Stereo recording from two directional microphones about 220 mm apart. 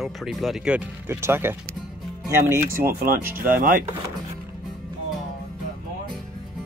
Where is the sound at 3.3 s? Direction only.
40° right (ahead or behind).